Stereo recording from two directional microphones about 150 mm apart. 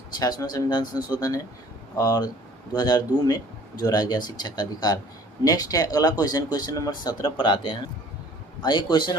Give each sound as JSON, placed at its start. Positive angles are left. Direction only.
{"t": 0.2, "sound": "speech", "side_deg": 25}